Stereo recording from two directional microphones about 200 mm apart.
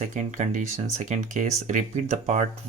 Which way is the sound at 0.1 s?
40° right (ahead or behind).